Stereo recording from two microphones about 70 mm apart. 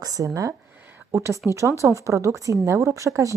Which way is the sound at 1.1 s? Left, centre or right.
Right.